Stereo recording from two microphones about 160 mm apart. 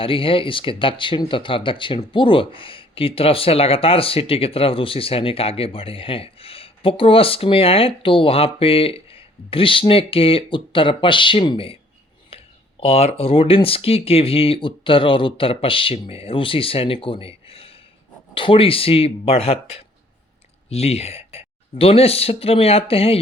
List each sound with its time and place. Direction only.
0.0 s speech: 35° left (ahead or behind)
12.3 s a sound: 35° left (ahead or behind)
12.8 s speech: 40° left (ahead or behind)